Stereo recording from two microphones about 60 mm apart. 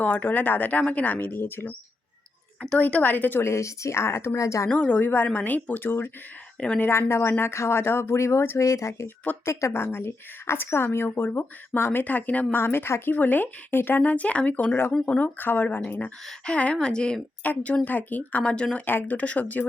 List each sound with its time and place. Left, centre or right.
0.0 s speech: left
1.3 s speech: left
2.7 s speech: left
3.4 s speech: left
4.4 s a woman's voice: left
4.7 s speech: centre
4.9 s speech: left
6.6 s speech: left
6.8 s a woman's voice: left
9.8 s speech: left
12.5 s a woman's voice: left; by 17.2 s centre
17.4 s speech: left
18.9 s speech: left